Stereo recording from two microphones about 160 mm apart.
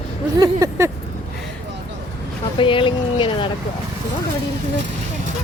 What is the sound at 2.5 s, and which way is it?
Speech, 30° left (ahead or behind).